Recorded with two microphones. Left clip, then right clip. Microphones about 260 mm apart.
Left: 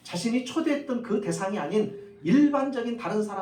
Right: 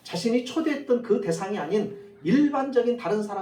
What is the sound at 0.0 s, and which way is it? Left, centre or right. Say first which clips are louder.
Speech: right 4 dB; left.